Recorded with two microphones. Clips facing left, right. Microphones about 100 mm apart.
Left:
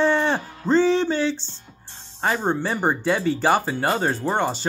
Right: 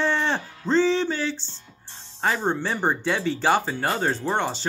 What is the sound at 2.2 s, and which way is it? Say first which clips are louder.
Speech: left 2 dB; 10° left (ahead or behind).